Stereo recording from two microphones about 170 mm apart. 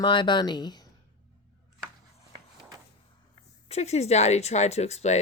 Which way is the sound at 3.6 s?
40° left (ahead or behind).